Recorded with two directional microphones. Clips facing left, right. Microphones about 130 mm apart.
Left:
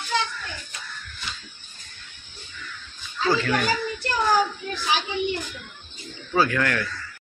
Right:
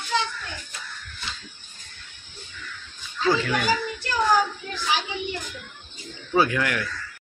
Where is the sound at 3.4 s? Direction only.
10° right (ahead or behind).